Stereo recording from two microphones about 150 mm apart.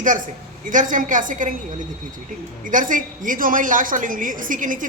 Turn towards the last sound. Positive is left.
turn(degrees=-60)  # may be behind; listen again after turning